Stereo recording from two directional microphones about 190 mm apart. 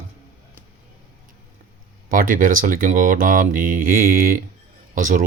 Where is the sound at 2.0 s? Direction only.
45° right (ahead or behind).